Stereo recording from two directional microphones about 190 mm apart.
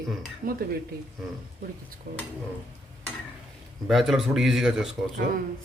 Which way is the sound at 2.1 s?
60° right (ahead or behind).